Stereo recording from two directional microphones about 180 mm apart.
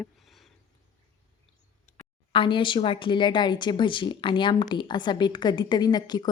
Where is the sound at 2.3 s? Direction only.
30° left (ahead or behind).